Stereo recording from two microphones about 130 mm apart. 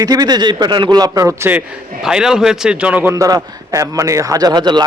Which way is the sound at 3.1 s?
25° right (ahead or behind).